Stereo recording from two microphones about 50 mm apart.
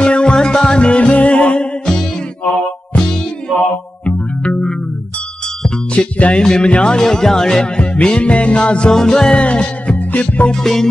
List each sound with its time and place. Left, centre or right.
0.0 s music: centre
4.0 s music: left
6.1 s music: left
6.4 s music: centre
10.5 s music: centre